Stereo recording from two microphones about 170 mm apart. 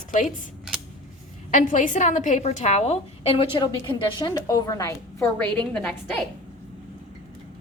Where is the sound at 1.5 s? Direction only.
50° left (ahead or behind); by 5.0 s 20° left (ahead or behind).